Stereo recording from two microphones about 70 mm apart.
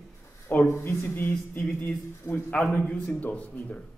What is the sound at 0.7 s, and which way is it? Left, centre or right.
A man's voice, left.